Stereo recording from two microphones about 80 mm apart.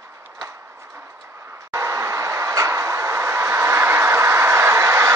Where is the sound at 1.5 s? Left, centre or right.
Right.